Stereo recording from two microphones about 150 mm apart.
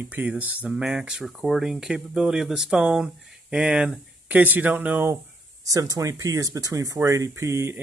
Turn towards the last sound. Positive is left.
turn(degrees=-20)  # may be behind; listen again after turning